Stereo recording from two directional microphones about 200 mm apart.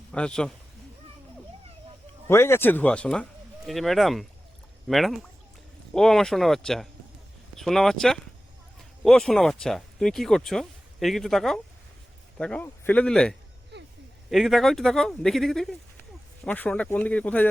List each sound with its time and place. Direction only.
0.1 s speech: 5° left (ahead or behind)
2.2 s speech: 10° left (ahead or behind)
13.7 s a sound: 55° right (ahead or behind)
14.3 s speech: centre (ahead or behind)